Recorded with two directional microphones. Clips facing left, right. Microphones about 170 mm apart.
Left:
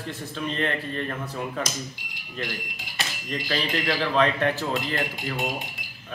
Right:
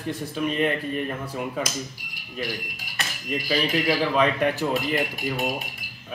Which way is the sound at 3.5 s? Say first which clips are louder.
Right 4 dB; 5° right (ahead or behind).